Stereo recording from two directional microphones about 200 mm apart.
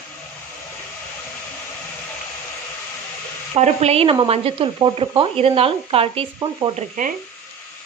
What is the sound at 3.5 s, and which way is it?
Speech, 35° right (ahead or behind).